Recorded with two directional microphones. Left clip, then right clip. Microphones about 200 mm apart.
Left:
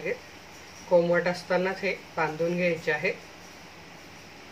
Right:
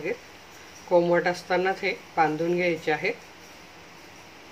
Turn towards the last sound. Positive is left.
turn(degrees=-40)  # may be behind; listen again after turning